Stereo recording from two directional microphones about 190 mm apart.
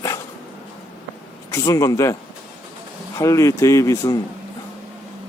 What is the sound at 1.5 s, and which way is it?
Speech, 15° left (ahead or behind).